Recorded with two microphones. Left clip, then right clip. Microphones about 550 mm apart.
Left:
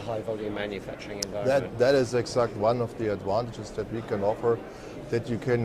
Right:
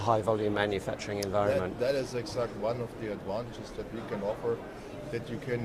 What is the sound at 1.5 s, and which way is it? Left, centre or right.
A man's voice, left.